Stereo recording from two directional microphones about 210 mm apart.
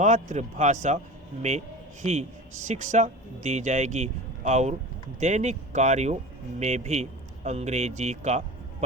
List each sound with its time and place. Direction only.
0.0 s speech: 35° right (ahead or behind)